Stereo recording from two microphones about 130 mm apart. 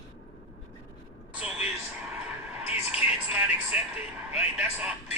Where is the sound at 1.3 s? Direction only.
10° right (ahead or behind).